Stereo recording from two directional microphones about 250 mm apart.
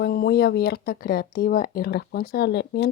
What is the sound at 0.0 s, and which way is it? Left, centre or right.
A woman's voice, left.